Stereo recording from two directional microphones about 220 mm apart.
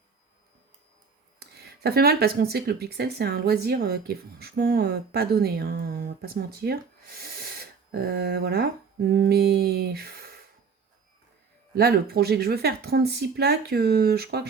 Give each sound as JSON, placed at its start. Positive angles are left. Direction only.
{"t": 1.4, "sound": "speech", "side_deg": -45}
{"t": 11.7, "sound": "speech", "side_deg": -45}